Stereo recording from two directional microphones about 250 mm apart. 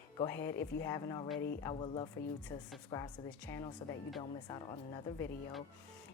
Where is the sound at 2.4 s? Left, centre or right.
Centre.